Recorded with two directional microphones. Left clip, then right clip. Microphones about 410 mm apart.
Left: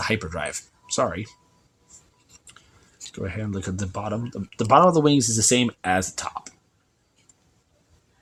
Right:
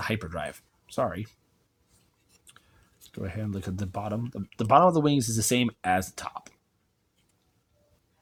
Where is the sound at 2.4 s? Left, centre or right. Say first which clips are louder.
Left 4 dB; right.